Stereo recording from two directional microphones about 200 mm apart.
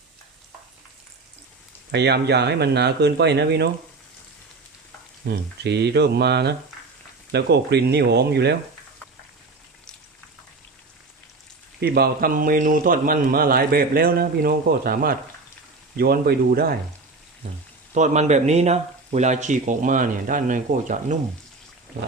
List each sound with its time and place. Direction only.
1.9 s speech: 55° right (ahead or behind)
5.3 s speech: 60° right (ahead or behind)
11.8 s a man's voice: 50° right (ahead or behind)
17.9 s speech: 35° right (ahead or behind)